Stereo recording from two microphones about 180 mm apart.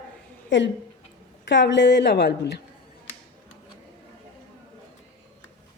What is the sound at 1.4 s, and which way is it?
A woman's voice, 80° left.